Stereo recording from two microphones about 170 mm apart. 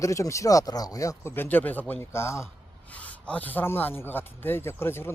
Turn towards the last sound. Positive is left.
turn(degrees=15)  # may be behind; listen again after turning